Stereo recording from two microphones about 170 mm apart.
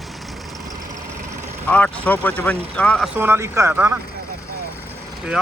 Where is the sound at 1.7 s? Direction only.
10° left (ahead or behind).